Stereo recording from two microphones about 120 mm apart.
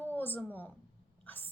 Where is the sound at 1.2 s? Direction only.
15° left (ahead or behind).